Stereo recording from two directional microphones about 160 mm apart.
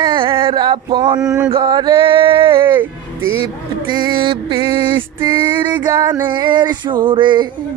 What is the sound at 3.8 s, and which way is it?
Music, 30° right (ahead or behind).